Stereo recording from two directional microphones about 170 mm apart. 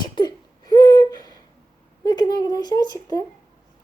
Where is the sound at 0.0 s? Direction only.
25° left (ahead or behind).